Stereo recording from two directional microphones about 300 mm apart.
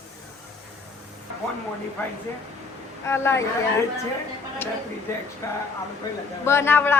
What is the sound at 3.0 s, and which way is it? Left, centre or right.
Speech, centre.